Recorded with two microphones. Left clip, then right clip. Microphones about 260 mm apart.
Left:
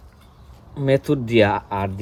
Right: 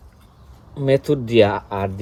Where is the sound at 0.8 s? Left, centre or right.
Left.